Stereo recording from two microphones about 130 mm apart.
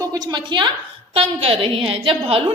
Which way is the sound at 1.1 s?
50° right (ahead or behind).